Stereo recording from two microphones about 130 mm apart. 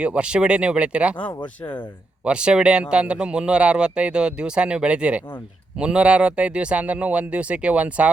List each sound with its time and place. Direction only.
0.0 s speech: 10° right (ahead or behind)
1.3 s speech: 35° left (ahead or behind)
2.2 s speech: 5° right (ahead or behind)